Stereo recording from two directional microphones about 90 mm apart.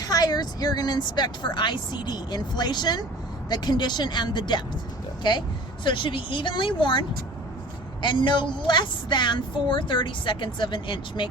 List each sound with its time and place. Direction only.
0.0 s a woman's voice: 45° left (ahead or behind)
5.8 s a woman's voice: 65° left (ahead or behind)
8.0 s a woman's voice: 65° left (ahead or behind)